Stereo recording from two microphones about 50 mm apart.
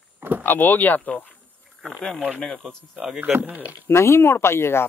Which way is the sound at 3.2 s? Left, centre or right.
Right.